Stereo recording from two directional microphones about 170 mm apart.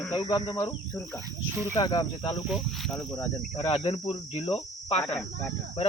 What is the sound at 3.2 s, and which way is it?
Speech, 25° left (ahead or behind).